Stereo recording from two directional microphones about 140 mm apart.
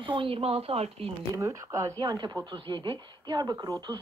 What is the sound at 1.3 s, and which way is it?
Speech, 20° right (ahead or behind).